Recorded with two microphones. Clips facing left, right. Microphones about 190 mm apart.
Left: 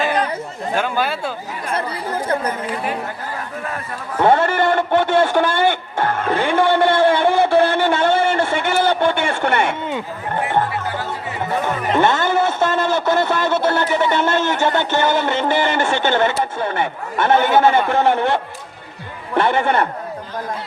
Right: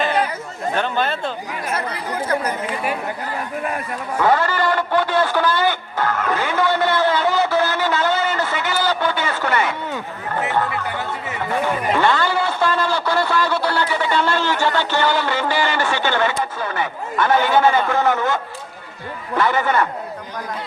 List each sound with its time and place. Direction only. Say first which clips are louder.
0.7 s speech: left 1 dB; 5° left (ahead or behind)
1.7 s chatter: left 3 dB; 30° left (ahead or behind)
4.2 s speech: left 3 dB; 25° left (ahead or behind)
7.3 s a sound: left 4 dB; 30° left (ahead or behind)
11.3 s a man's voice: even; 20° left (ahead or behind)
19.4 s a man's voice: left 2 dB; 25° left (ahead or behind)